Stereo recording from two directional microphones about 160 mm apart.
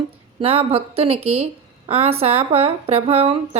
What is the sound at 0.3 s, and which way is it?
Speech, 35° right (ahead or behind).